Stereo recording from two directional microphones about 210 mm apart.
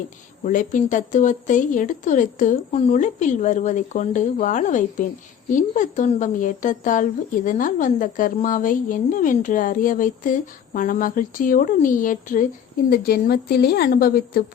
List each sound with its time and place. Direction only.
0.4 s a woman's voice: 40° left (ahead or behind)